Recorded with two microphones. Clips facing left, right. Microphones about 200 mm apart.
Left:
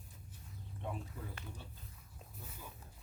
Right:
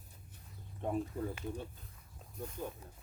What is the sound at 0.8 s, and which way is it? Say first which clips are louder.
Speech: right 8 dB; 45° right (ahead or behind).